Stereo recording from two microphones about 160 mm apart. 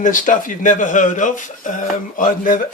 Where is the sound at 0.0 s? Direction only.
55° left (ahead or behind).